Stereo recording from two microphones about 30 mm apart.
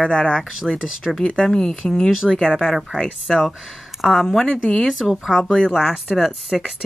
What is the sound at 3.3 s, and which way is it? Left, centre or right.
Speech, centre.